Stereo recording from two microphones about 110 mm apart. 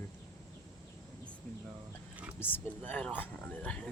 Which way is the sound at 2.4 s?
15° left (ahead or behind).